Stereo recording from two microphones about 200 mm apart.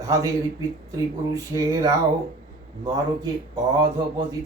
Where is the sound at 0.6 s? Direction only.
15° right (ahead or behind).